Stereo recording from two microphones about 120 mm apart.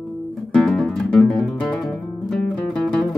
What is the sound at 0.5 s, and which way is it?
Guitar, 5° left (ahead or behind).